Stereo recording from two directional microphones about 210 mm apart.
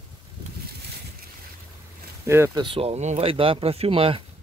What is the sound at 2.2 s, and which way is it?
Speech, 10° right (ahead or behind).